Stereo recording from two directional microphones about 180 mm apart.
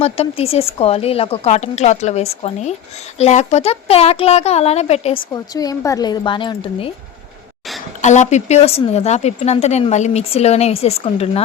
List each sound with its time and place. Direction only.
0.0 s speech: 35° left (ahead or behind)
5.3 s speech: 20° left (ahead or behind)
8.0 s speech: 40° left (ahead or behind)